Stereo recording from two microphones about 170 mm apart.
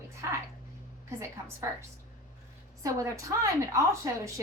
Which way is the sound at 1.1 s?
15° right (ahead or behind).